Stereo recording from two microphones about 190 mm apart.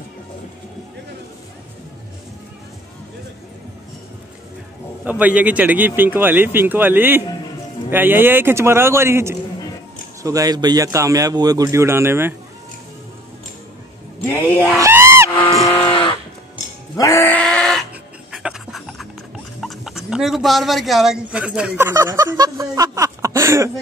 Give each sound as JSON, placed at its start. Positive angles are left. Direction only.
{"t": 5.2, "sound": "speech", "side_deg": -5}
{"t": 14.8, "sound": "screaming", "side_deg": -15}
{"t": 15.8, "sound": "a sound", "side_deg": 25}
{"t": 16.9, "sound": "goat", "side_deg": 15}
{"t": 18.3, "sound": "dog", "side_deg": 0}
{"t": 19.6, "sound": "speech", "side_deg": 0}